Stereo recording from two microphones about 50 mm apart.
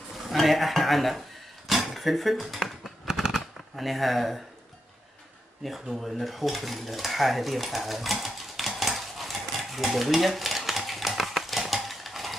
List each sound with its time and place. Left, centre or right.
0.3 s speech: centre
1.7 s a sound: centre
3.1 s shuffling cards: centre
5.6 s dishes: centre